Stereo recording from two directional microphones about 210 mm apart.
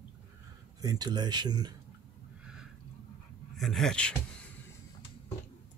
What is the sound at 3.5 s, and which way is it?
Speech, centre (ahead or behind).